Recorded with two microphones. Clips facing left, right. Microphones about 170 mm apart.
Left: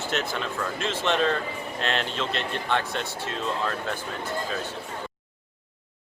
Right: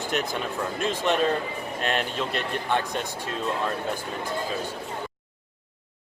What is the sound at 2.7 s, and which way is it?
Speech, 15° right (ahead or behind).